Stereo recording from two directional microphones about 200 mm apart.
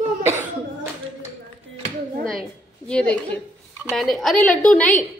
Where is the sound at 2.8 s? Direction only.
5° left (ahead or behind).